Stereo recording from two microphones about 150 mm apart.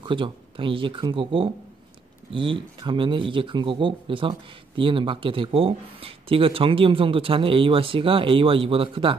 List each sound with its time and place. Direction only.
0.0 s speech: 35° right (ahead or behind)